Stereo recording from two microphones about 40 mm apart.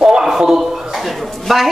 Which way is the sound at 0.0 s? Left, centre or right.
Centre.